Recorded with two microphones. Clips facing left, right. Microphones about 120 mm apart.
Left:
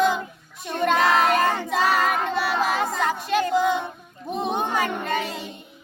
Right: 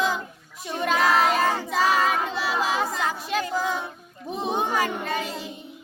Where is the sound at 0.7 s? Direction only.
5° right (ahead or behind).